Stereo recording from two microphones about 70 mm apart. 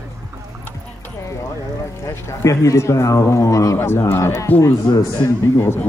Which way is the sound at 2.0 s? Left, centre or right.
Left.